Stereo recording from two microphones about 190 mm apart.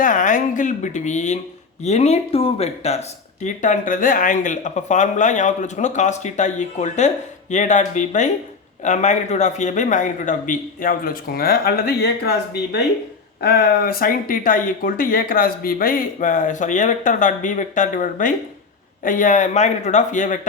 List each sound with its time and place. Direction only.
0.0 s speech: 45° left (ahead or behind)